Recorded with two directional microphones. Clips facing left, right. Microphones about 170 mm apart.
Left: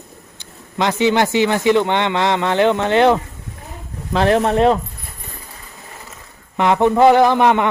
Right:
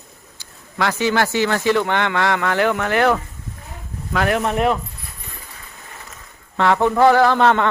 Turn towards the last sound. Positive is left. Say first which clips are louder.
# left 2 dB
turn(degrees=15)  # may be behind; listen again after turning